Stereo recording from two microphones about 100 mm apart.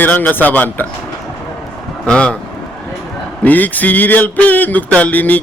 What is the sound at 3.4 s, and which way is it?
Speech, 15° left (ahead or behind).